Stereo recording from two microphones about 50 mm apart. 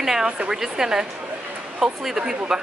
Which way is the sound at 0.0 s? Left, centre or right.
Centre.